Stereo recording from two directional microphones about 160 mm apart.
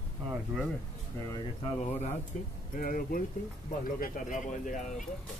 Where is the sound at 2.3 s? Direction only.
55° left (ahead or behind).